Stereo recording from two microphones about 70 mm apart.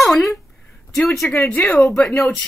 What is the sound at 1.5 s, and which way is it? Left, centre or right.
Speech, left.